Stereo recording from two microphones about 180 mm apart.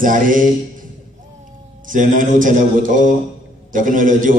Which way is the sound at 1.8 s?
45° right (ahead or behind).